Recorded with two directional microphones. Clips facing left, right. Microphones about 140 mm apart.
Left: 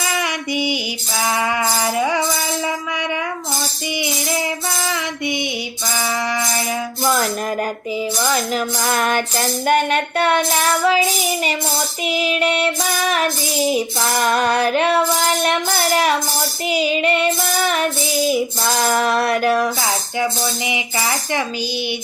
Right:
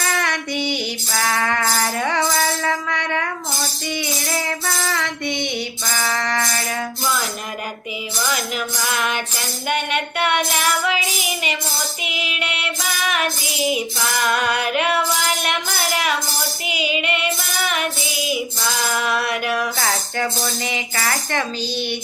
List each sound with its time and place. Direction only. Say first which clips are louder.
0.2 s female singing: left 2 dB; 10° left (ahead or behind)
1.2 s speech: left 2 dB; 10° left (ahead or behind)
4.8 s speech: left 1 dB; 15° left (ahead or behind)
8.3 s music: left 5 dB; 40° left (ahead or behind)
10.8 s child singing: left 6 dB; 35° left (ahead or behind)
15.7 s child singing: left 5 dB; 45° left (ahead or behind)
18.9 s music: left 5 dB; 40° left (ahead or behind)
19.4 s child singing: left 6 dB; 35° left (ahead or behind)
19.8 s music: left 2 dB; 20° left (ahead or behind)
20.4 s speech: left 2 dB; 15° left (ahead or behind)